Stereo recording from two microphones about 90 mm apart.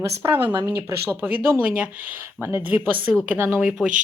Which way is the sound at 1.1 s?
20° right (ahead or behind).